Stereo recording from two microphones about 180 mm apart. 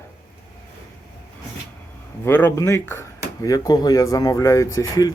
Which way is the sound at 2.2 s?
15° left (ahead or behind).